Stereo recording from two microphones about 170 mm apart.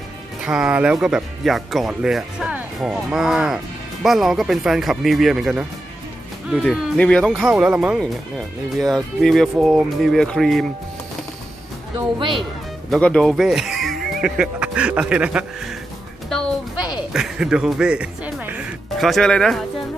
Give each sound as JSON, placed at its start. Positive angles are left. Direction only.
{"t": 0.4, "sound": "speech", "side_deg": -5}
{"t": 9.2, "sound": "speech", "side_deg": 0}
{"t": 11.9, "sound": "speech", "side_deg": -30}
{"t": 12.9, "sound": "speech", "side_deg": 5}
{"t": 16.7, "sound": "a sound", "side_deg": 25}
{"t": 17.1, "sound": "music", "side_deg": 0}